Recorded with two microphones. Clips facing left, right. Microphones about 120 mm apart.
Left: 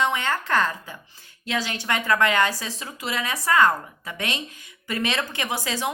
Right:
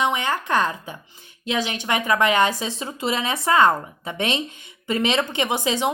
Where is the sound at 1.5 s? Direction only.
20° right (ahead or behind).